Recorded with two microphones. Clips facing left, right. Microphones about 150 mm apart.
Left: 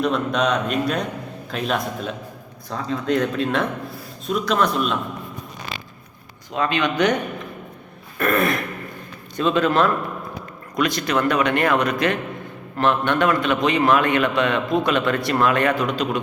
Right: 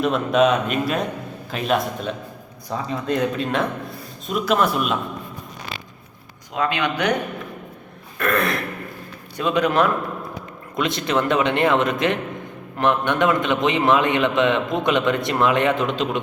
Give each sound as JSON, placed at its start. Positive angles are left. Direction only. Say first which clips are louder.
{"t": 0.0, "sound": "a man's voice", "louder": "right 3 dB", "side_deg": -5}
{"t": 6.6, "sound": "speech", "louder": "left 2 dB", "side_deg": -10}
{"t": 8.2, "sound": "a man's voice", "louder": "left 2 dB", "side_deg": 0}
{"t": 9.3, "sound": "a man's voice", "louder": "left 1 dB", "side_deg": -15}